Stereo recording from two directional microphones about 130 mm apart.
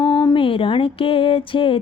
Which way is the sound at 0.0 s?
30° left (ahead or behind).